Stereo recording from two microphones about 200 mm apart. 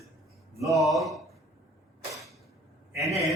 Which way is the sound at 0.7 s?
Centre (ahead or behind).